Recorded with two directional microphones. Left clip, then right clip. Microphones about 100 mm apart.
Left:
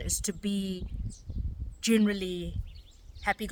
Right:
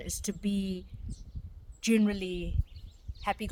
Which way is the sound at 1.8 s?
40° left (ahead or behind).